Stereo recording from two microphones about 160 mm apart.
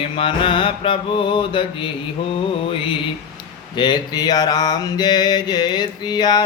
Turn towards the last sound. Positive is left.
turn(degrees=25)  # may be behind; listen again after turning